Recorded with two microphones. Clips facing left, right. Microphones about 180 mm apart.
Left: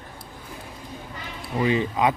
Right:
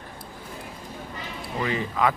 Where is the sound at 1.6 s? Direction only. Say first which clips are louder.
Left 3 dB; 20° left (ahead or behind).